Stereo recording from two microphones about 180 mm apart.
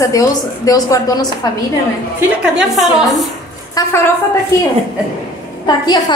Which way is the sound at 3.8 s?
20° left (ahead or behind).